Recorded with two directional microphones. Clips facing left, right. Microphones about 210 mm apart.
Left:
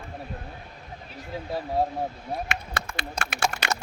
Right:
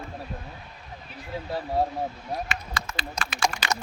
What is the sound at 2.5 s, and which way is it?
Speech, 65° left (ahead or behind).